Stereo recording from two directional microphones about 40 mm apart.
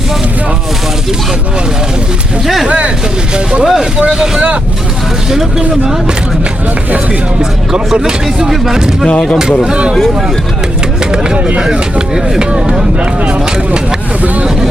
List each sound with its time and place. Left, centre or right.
2.6 s speech: right
3.3 s speech: right
7.9 s speech: right
8.4 s speech: centre
9.6 s speech: right
9.9 s speech: centre
11.1 s speech: right
11.3 s speech: right
11.7 s speech: centre